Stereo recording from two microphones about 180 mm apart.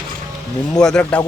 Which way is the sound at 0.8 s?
5° left (ahead or behind).